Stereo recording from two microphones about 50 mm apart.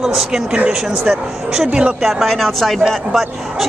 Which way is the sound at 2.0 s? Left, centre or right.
Centre.